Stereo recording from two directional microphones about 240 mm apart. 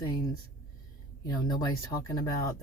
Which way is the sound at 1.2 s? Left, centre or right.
Centre.